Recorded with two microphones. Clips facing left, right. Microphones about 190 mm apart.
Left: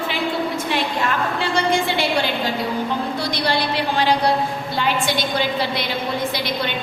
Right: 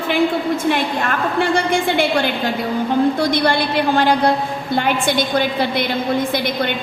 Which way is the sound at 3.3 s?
55° right (ahead or behind).